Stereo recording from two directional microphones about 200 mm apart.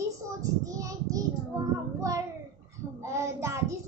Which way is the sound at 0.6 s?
15° right (ahead or behind).